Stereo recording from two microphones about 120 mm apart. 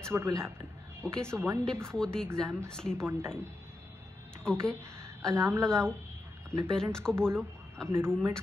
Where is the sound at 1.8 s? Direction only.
5° left (ahead or behind).